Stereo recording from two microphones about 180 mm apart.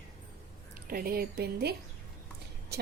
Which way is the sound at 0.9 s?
55° right (ahead or behind).